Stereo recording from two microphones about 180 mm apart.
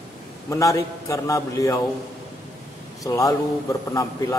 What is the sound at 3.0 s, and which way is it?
A man's voice, 20° left (ahead or behind).